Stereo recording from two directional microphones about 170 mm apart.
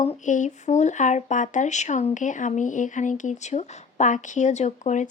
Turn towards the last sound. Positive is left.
turn(degrees=45)  # may be behind; listen again after turning